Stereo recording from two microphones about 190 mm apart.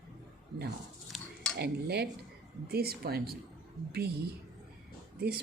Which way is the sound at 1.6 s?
55° right (ahead or behind).